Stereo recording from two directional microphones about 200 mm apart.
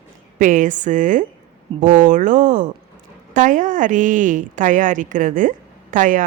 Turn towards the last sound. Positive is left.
turn(degrees=-40)  # may be behind; listen again after turning